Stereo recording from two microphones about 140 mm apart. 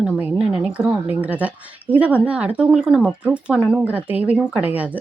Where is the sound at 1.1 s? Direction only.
10° right (ahead or behind).